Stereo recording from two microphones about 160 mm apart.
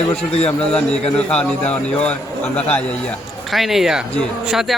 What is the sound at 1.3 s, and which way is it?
Speech, 5° left (ahead or behind).